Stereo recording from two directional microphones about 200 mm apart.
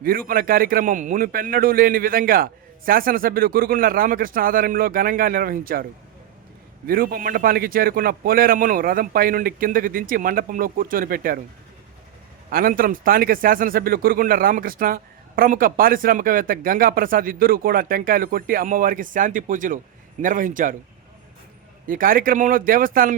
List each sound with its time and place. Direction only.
0.0 s a man's voice: 45° right (ahead or behind)
6.8 s a man's voice: 45° right (ahead or behind)
12.5 s a man's voice: 45° right (ahead or behind)
21.8 s a man's voice: 45° right (ahead or behind)